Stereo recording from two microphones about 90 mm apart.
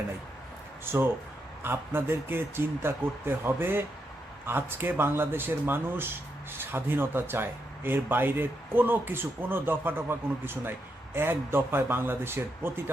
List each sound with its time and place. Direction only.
0.9 s speech: 25° right (ahead or behind)